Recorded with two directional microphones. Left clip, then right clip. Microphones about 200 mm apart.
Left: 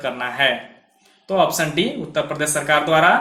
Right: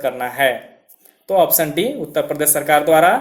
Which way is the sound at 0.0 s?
45° right (ahead or behind).